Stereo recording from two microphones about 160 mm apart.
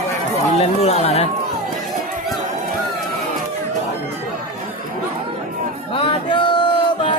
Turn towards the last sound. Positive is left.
turn(degrees=30)  # may be behind; listen again after turning